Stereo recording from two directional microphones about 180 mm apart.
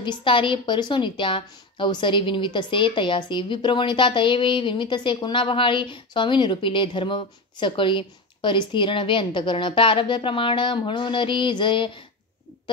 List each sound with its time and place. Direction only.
0.0 s a woman's voice: 25° left (ahead or behind)